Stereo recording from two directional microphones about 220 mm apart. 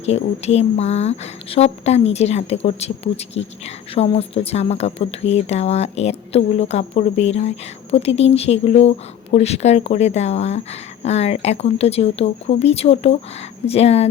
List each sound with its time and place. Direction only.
0.0 s a woman's voice: 30° left (ahead or behind)